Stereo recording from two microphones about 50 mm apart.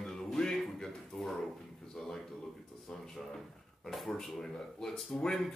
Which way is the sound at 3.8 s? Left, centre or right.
Centre.